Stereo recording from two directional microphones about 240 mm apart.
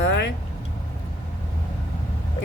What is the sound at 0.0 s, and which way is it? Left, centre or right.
Vehicle, left.